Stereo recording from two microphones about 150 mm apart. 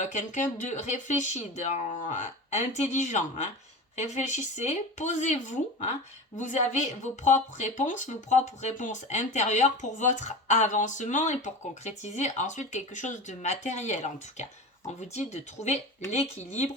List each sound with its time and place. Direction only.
0.0 s speech: 55° left (ahead or behind)